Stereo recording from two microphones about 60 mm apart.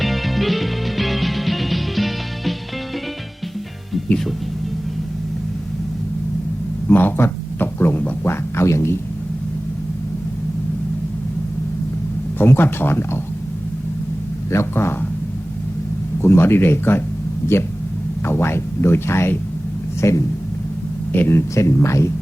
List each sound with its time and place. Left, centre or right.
0.0 s music: centre
6.8 s speech: left
8.2 s speech: left
12.4 s speech: left
14.5 s speech: left
16.2 s speech: left
18.3 s speech: left
21.1 s speech: left
21.5 s speech: left